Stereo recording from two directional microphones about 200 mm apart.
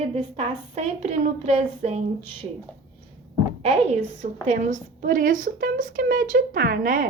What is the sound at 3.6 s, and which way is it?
A woman's voice, 30° right (ahead or behind).